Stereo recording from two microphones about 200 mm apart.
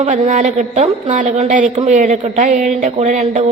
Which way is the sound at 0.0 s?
35° right (ahead or behind).